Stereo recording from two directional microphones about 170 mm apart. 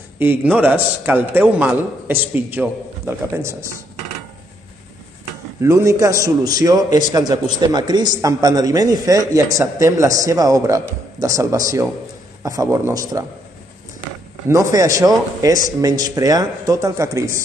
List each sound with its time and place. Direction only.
0.2 s a man's voice: 10° right (ahead or behind)
5.6 s speech: 15° right (ahead or behind)
14.5 s speech: 20° right (ahead or behind)